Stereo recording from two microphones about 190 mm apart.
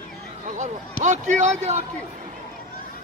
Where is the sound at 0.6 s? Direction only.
40° right (ahead or behind).